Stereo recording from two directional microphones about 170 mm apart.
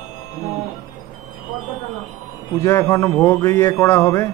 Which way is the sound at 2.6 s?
15° left (ahead or behind).